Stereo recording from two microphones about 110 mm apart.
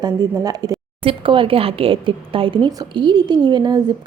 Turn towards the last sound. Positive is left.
turn(degrees=-40)  # may be behind; listen again after turning